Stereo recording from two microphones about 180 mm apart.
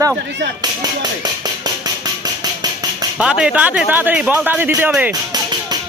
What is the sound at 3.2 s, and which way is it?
Speech, 5° right (ahead or behind).